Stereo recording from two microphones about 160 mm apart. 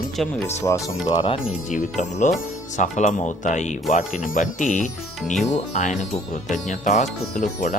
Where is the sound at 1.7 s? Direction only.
50° left (ahead or behind).